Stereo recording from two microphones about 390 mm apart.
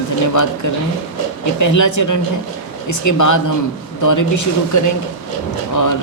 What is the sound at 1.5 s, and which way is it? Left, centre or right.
Speech, left.